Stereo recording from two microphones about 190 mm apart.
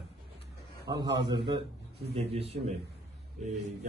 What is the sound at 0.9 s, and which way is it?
A man's voice, 20° right (ahead or behind).